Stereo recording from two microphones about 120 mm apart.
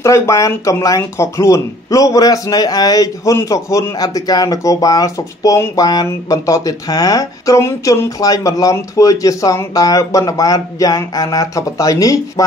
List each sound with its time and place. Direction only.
0.0 s speech: 25° left (ahead or behind)